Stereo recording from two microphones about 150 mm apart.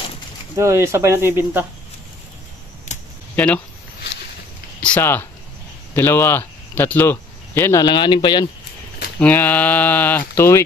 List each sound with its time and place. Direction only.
0.6 s speech: 20° right (ahead or behind)
2.9 s a sound: 50° left (ahead or behind)
3.3 s speech: 10° left (ahead or behind)
4.8 s speech: 15° left (ahead or behind)
7.8 s speech: 30° left (ahead or behind)
9.2 s speech: 10° left (ahead or behind)